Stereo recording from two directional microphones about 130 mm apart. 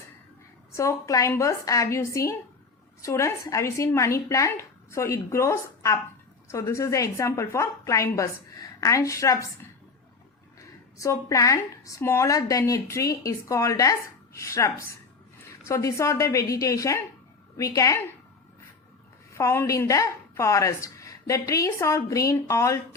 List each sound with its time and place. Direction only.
0.7 s a woman's voice: 25° left (ahead or behind)
10.9 s a woman's voice: 25° left (ahead or behind)
19.3 s a woman's voice: 20° left (ahead or behind)